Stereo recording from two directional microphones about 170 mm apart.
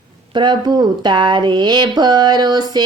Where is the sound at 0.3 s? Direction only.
25° right (ahead or behind).